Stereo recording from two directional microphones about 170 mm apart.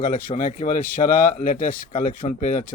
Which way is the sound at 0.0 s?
50° left (ahead or behind).